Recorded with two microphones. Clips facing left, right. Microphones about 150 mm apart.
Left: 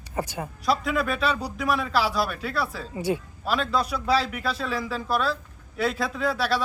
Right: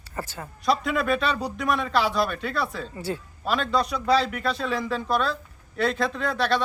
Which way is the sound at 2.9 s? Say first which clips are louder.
Left 4 dB; 15° left (ahead or behind).